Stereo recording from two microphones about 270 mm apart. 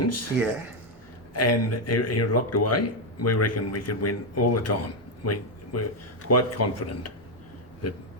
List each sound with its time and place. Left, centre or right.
0.0 s speech: left
1.3 s speech: left
5.2 s a sound: left
6.2 s speech: left